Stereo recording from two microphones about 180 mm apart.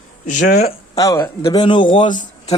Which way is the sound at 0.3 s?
45° left (ahead or behind).